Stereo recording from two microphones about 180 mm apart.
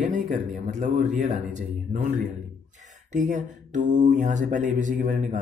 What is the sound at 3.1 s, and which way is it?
Mantra, 40° right (ahead or behind).